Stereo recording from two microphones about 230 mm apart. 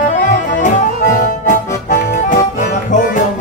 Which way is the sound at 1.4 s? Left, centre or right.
Left.